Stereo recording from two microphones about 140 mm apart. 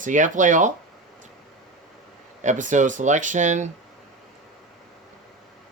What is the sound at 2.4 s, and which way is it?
Speech, 60° right (ahead or behind).